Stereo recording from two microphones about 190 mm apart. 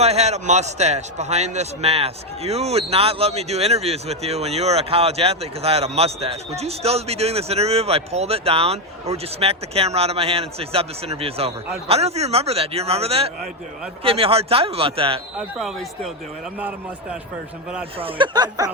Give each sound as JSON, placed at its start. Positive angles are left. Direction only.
{"t": 0.0, "sound": "a man's voice", "side_deg": -35}
{"t": 15.4, "sound": "a man's voice", "side_deg": 0}
{"t": 17.9, "sound": "speech", "side_deg": -25}